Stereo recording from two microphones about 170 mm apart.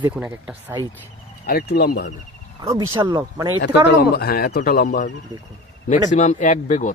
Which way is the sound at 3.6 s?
75° left (ahead or behind).